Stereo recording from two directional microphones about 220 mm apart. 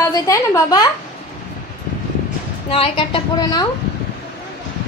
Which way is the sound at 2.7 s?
25° left (ahead or behind).